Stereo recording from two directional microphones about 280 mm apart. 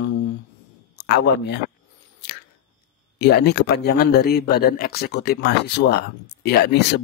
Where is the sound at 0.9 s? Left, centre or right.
Left.